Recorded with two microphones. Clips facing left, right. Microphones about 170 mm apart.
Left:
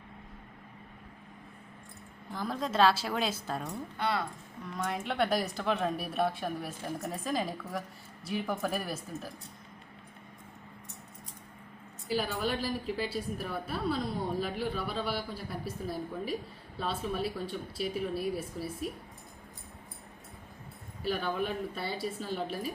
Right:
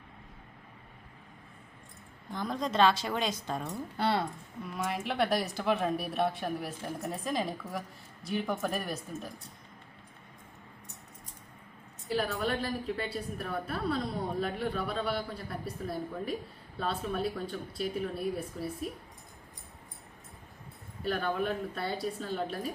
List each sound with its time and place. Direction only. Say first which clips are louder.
2.3 s speech: right 1 dB; 5° left (ahead or behind)
3.9 s speech: right 3 dB; 30° right (ahead or behind)
4.6 s speech: right 1 dB; 5° right (ahead or behind)
12.0 s speech: right 1 dB; centre (ahead or behind)
21.0 s speech: right 1 dB; centre (ahead or behind)